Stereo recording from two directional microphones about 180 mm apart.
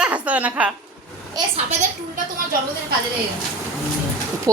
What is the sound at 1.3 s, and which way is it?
Speech, 35° right (ahead or behind).